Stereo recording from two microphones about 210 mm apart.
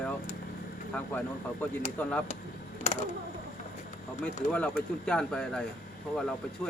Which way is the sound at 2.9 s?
35° left (ahead or behind).